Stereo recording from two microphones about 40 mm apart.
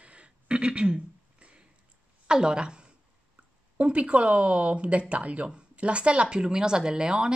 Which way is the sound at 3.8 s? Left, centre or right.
Right.